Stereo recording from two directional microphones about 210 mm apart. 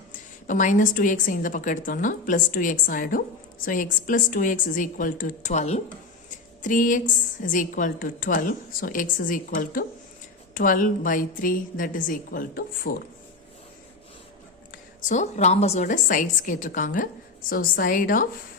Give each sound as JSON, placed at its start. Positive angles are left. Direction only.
{"t": 0.1, "sound": "a woman's voice", "side_deg": 40}
{"t": 14.7, "sound": "a woman's voice", "side_deg": 35}